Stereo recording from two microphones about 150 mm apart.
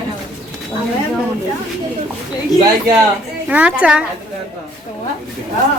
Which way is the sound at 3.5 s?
10° right (ahead or behind).